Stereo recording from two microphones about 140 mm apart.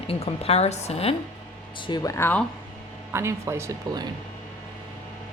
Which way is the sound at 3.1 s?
20° right (ahead or behind).